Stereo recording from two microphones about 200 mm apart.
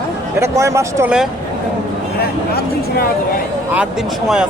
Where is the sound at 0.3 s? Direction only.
15° right (ahead or behind).